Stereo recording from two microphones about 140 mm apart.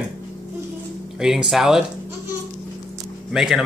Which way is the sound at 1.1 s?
5° right (ahead or behind).